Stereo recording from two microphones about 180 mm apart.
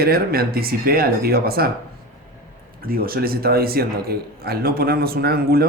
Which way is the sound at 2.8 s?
55° right (ahead or behind).